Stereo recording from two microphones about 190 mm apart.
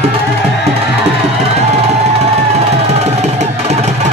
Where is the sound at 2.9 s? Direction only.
35° right (ahead or behind).